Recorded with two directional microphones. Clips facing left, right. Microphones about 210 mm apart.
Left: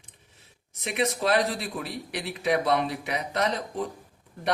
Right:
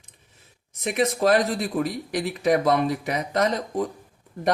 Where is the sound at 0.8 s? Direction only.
45° right (ahead or behind).